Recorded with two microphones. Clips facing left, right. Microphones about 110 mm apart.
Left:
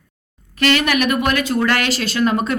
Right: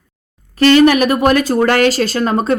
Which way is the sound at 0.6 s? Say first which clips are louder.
Right 8 dB; 35° right (ahead or behind).